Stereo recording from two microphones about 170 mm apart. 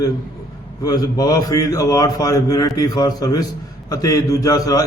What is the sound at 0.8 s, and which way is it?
A man's voice, 20° left (ahead or behind).